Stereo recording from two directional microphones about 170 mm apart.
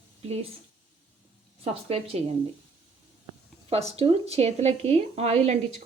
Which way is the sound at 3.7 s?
35° right (ahead or behind).